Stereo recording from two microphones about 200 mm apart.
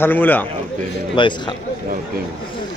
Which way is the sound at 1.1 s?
25° left (ahead or behind).